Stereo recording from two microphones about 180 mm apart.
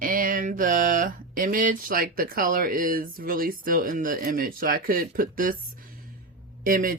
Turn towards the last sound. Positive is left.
turn(degrees=-50)  # may be behind; listen again after turning